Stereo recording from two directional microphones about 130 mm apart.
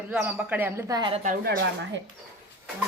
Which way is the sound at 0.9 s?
35° right (ahead or behind).